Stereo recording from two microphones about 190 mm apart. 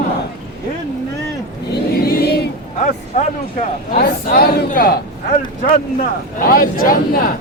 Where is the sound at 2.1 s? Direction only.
55° left (ahead or behind).